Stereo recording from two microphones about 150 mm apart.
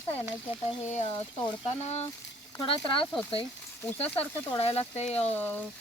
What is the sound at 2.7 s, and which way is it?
Speech, 35° left (ahead or behind).